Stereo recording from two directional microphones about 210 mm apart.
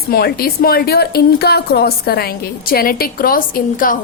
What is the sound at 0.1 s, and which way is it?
A woman's voice, 50° left (ahead or behind).